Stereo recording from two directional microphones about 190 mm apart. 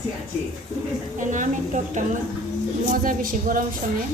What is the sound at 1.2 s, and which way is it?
A woman's voice, 40° right (ahead or behind).